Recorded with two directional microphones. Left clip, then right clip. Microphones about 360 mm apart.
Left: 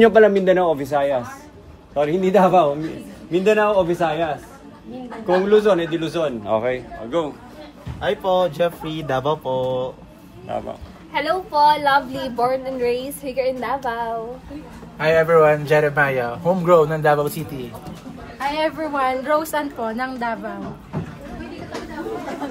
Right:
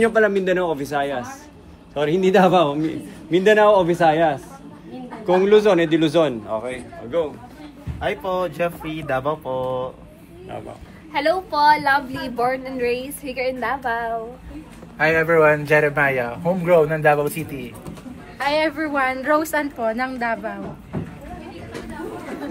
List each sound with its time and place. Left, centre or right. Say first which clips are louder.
0.1 s a woman's voice: left 4 dB; centre
6.5 s a man's voice: left 6 dB; left
8.0 s a woman's voice: left 4 dB; centre
11.1 s a woman's voice: left 1 dB; centre
18.5 s a woman's voice: right 2 dB; centre